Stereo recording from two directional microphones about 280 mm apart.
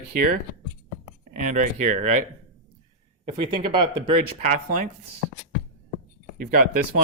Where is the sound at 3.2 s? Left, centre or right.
Centre.